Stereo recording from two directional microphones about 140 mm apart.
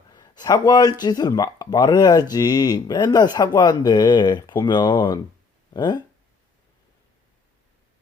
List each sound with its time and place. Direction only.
0.1 s speech: 30° left (ahead or behind)